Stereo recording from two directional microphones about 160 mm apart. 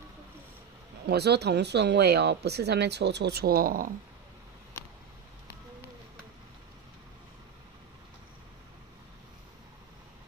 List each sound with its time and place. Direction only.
1.0 s speech: 90° right; by 3.9 s 65° right (ahead or behind)